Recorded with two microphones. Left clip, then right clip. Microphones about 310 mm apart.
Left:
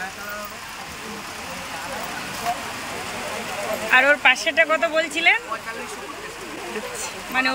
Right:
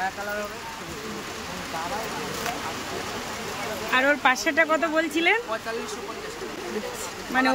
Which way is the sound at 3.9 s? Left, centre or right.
Centre.